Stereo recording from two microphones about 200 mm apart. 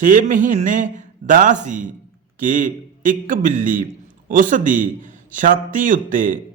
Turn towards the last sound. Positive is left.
turn(degrees=-40)  # may be behind; listen again after turning